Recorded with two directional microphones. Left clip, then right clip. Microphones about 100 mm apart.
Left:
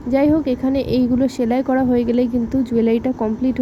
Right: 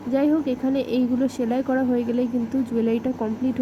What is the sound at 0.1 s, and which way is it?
A woman's voice, 40° left (ahead or behind).